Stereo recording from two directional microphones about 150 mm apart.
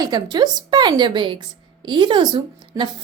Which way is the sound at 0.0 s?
25° right (ahead or behind).